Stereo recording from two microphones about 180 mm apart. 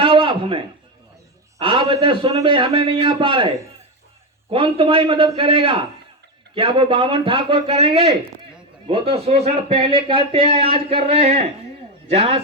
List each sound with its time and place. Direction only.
0.0 s a sound: 30° right (ahead or behind)
1.5 s a man's voice: 30° right (ahead or behind)
4.5 s a man's voice: 30° right (ahead or behind)